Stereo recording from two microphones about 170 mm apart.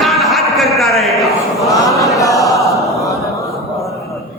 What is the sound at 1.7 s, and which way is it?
Chant, 20° left (ahead or behind).